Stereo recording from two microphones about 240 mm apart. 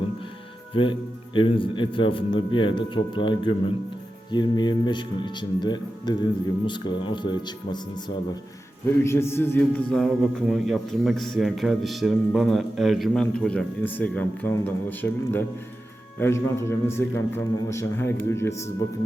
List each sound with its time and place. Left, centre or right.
0.7 s a man's voice: left